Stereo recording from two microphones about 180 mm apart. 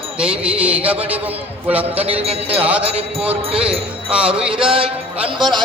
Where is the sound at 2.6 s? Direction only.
10° right (ahead or behind).